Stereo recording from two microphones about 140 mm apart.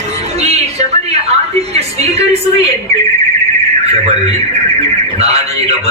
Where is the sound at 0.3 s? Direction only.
50° right (ahead or behind).